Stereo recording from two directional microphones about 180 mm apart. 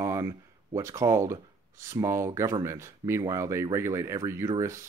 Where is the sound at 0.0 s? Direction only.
15° right (ahead or behind).